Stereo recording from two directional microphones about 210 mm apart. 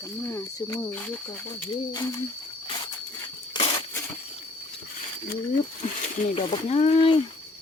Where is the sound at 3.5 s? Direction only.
25° left (ahead or behind).